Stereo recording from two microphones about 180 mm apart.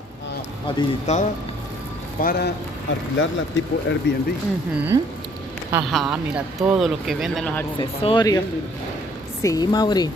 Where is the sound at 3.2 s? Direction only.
90° left.